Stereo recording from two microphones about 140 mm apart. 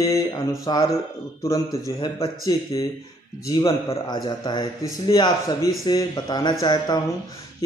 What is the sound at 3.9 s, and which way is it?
Speech, 30° left (ahead or behind).